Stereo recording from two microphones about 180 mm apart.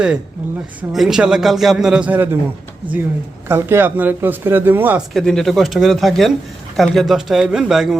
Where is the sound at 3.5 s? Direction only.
15° right (ahead or behind).